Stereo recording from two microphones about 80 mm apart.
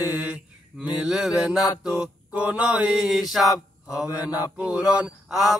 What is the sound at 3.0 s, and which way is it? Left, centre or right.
Mantra, centre.